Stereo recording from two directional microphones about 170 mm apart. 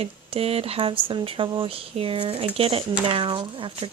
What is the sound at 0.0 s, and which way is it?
Speech, 35° right (ahead or behind).